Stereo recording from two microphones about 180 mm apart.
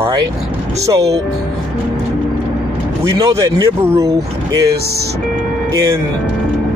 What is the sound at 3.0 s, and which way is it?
Speech, 15° right (ahead or behind).